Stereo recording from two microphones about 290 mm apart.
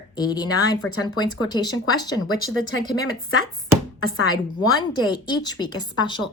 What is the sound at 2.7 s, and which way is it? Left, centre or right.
Speech, left.